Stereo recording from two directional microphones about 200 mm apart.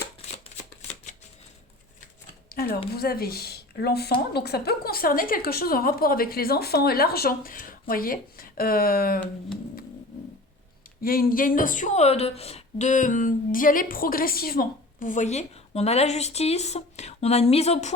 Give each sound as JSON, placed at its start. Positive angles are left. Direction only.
{"t": 2.5, "sound": "a sound", "side_deg": 50}
{"t": 2.9, "sound": "speech", "side_deg": 50}
{"t": 11.0, "sound": "a woman's voice", "side_deg": 45}